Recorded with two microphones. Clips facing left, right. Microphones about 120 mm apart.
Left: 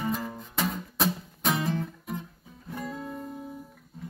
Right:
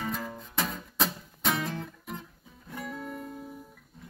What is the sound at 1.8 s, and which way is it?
Guitar, 10° left (ahead or behind).